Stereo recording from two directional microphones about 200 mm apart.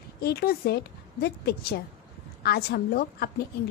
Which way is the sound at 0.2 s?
50° left (ahead or behind).